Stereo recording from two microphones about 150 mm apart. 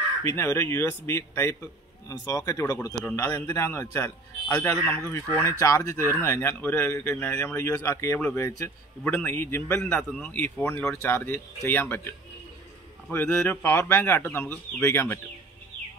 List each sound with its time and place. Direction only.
0.2 s speech: 15° left (ahead or behind)
13.1 s speech: 15° left (ahead or behind)